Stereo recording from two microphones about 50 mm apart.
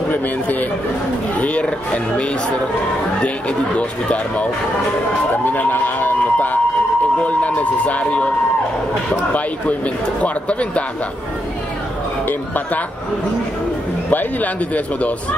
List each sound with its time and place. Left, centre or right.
0.1 s a man's voice: left
3.4 s speech: left
5.4 s speech: left
10.2 s speech: left
12.3 s a man's voice: left
14.1 s a man's voice: left